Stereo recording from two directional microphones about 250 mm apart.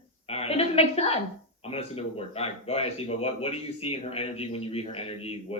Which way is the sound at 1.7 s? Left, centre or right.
Left.